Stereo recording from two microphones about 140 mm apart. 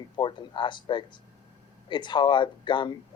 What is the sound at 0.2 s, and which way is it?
Speech, 35° left (ahead or behind).